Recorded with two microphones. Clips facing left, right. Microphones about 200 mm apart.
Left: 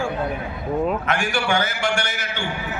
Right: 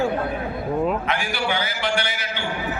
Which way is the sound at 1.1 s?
50° left (ahead or behind).